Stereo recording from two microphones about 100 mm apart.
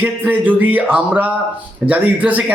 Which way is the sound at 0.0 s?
15° right (ahead or behind).